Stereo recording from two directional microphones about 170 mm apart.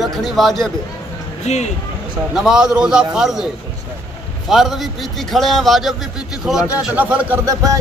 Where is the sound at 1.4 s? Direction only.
40° left (ahead or behind).